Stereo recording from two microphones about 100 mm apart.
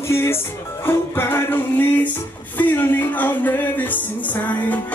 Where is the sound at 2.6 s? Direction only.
20° left (ahead or behind).